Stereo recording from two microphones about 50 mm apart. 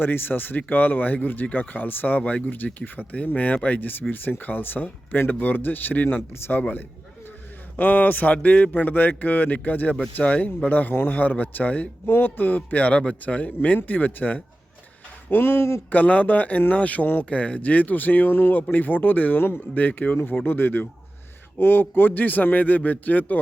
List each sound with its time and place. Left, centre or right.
0.0 s speech: left
3.8 s speech: left
8.7 s speech: left
10.7 s speech: left
15.3 s speech: left
15.9 s speech: left
19.7 s speech: left